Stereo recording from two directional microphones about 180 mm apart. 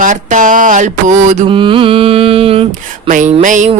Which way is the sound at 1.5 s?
30° right (ahead or behind).